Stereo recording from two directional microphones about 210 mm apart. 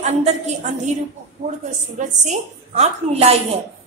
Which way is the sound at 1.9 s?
35° right (ahead or behind).